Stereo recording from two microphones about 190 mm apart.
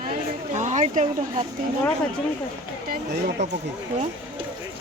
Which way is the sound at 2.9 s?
55° right (ahead or behind).